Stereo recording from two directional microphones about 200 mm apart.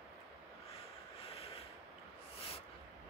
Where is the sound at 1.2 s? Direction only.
30° left (ahead or behind).